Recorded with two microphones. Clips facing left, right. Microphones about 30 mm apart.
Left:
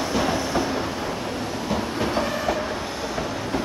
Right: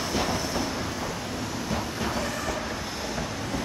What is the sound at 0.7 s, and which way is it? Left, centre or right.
Train, left.